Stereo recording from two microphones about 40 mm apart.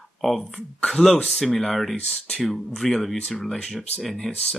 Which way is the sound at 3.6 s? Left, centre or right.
Centre.